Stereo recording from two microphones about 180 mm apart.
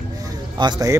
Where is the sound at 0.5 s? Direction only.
20° right (ahead or behind).